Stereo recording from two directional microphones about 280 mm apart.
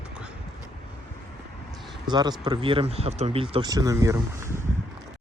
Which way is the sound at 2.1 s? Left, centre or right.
Centre.